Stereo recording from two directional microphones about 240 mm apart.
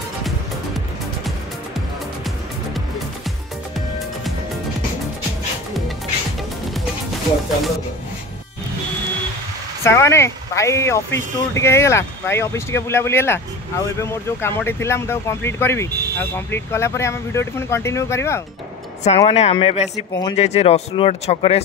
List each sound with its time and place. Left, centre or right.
9.8 s speech: centre
19.1 s speech: left